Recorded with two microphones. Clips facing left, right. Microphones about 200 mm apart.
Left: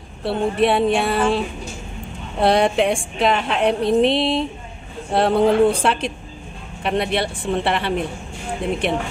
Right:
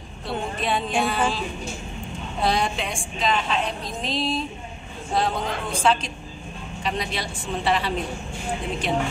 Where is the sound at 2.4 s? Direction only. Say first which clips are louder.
Left 9 dB; 65° left (ahead or behind).